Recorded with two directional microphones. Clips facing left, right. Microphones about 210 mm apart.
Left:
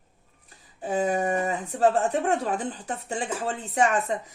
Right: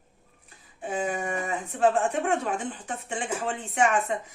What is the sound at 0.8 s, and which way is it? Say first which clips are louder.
Speech: left 5 dB; 40° left (ahead or behind).